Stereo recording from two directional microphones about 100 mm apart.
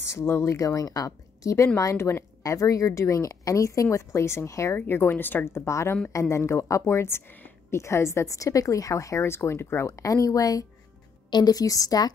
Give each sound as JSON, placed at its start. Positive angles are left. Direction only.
{"t": 0.0, "sound": "a woman's voice", "side_deg": 25}